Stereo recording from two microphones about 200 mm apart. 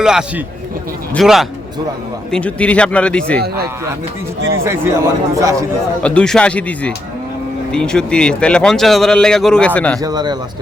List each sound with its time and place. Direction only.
0.0 s a man's voice: 5° right (ahead or behind)
4.4 s speech: 80° right
4.6 s speech: 15° right (ahead or behind)
6.0 s a man's voice: 5° left (ahead or behind)
10.0 s speech: 20° right (ahead or behind)